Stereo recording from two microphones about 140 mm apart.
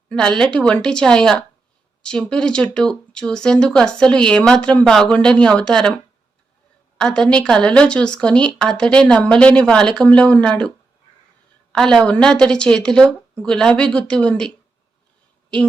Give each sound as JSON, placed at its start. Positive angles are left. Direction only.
{"t": 0.1, "sound": "speech", "side_deg": 5}
{"t": 6.9, "sound": "a woman's voice", "side_deg": 5}
{"t": 11.7, "sound": "speech", "side_deg": 5}